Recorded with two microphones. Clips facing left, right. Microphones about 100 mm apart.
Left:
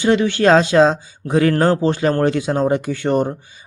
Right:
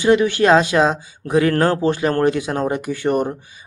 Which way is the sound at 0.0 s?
30° left (ahead or behind).